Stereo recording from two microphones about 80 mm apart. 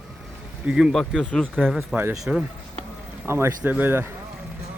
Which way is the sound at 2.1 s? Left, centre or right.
Centre.